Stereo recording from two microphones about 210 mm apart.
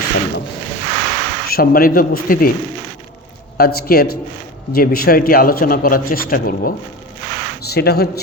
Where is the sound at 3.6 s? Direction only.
45° left (ahead or behind).